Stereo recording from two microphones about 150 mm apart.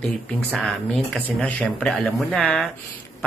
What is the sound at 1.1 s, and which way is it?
Speech, 10° left (ahead or behind).